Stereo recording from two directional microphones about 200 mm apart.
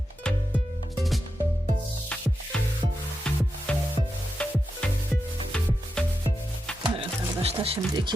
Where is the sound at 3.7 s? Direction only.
5° left (ahead or behind).